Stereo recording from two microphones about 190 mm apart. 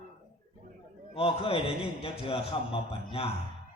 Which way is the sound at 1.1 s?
30° left (ahead or behind).